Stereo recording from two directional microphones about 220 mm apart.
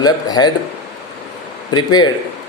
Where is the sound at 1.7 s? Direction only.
20° left (ahead or behind).